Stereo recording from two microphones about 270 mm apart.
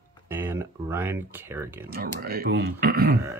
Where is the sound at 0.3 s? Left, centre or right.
Centre.